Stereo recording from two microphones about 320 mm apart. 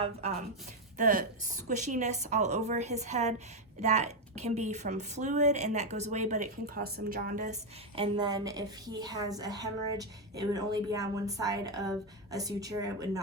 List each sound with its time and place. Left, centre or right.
0.0 s a woman's voice: centre